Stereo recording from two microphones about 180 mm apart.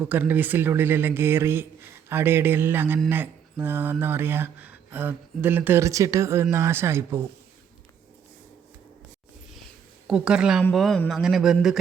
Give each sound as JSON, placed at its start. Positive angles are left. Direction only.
{"t": 0.0, "sound": "speech", "side_deg": -10}
{"t": 10.1, "sound": "speech", "side_deg": -5}